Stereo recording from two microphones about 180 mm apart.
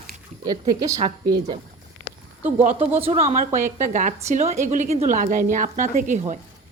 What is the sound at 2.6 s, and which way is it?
A woman's voice, 40° right (ahead or behind).